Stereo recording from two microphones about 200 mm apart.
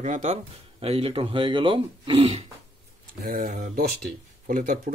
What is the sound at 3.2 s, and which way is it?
Speech, 45° right (ahead or behind).